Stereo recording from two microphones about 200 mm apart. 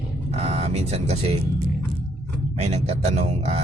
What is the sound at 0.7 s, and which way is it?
Speech, 30° right (ahead or behind).